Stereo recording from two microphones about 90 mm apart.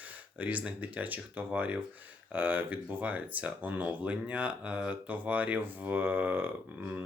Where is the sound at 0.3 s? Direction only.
15° right (ahead or behind).